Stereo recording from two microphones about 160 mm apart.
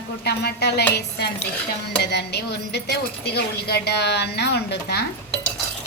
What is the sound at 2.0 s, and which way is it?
Speech, 90° left.